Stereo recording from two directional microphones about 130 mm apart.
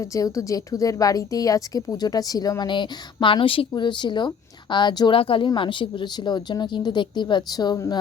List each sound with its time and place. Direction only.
0.0 s a woman's voice: 25° left (ahead or behind)